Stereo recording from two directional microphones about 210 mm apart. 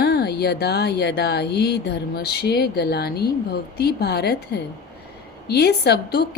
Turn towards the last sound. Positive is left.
turn(degrees=50)  # may be behind; listen again after turning